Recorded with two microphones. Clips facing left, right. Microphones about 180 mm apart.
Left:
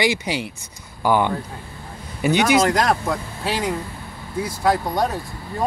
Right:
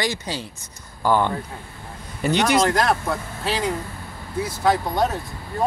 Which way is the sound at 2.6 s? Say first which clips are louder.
Left 1 dB; 15° left (ahead or behind).